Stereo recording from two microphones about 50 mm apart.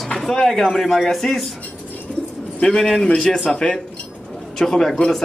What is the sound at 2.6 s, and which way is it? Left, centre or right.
A man's voice, centre.